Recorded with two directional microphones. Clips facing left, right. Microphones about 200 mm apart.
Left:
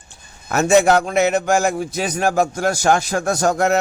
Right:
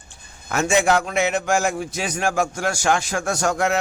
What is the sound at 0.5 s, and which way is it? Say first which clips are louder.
A man's voice: left 5 dB; 40° left (ahead or behind).